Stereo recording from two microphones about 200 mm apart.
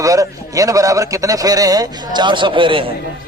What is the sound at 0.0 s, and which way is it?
A man's voice, 15° right (ahead or behind).